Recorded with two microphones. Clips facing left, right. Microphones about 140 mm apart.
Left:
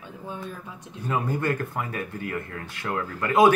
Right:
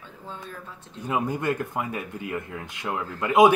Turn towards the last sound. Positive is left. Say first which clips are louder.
# right 1 dB
turn(degrees=-15)  # may be behind; listen again after turning